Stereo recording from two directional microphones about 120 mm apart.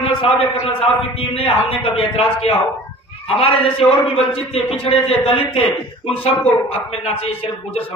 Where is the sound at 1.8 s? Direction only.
50° left (ahead or behind).